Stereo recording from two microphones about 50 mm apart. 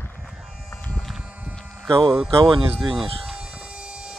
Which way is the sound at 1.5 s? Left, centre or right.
Centre.